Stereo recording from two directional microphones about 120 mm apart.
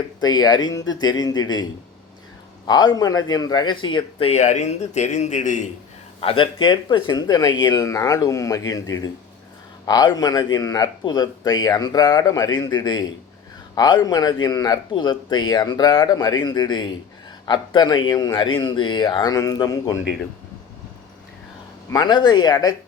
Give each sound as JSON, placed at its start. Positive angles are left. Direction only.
{"t": 0.2, "sound": "speech", "side_deg": 35}
{"t": 2.6, "sound": "speech", "side_deg": 35}
{"t": 4.3, "sound": "speech", "side_deg": 85}
{"t": 6.1, "sound": "speech", "side_deg": 50}
{"t": 21.9, "sound": "speech", "side_deg": 35}